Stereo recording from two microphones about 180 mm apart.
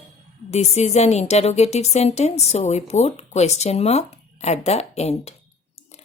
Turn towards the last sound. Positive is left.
turn(degrees=35)  # may be behind; listen again after turning